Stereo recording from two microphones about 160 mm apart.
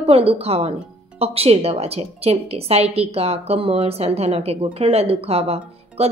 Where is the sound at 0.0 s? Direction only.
35° right (ahead or behind).